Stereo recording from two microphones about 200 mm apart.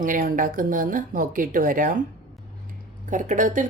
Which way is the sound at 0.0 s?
40° right (ahead or behind).